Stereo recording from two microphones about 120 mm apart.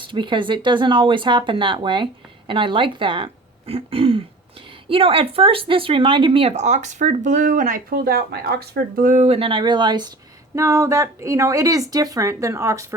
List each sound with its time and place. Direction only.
0.1 s speech: 40° right (ahead or behind)
6.5 s speech: 75° right (ahead or behind)
9.0 s speech: 70° right (ahead or behind); by 10.1 s 40° right (ahead or behind)
10.5 s speech: 25° right (ahead or behind)